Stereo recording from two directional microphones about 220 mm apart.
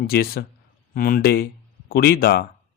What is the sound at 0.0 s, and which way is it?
Speech, 45° left (ahead or behind).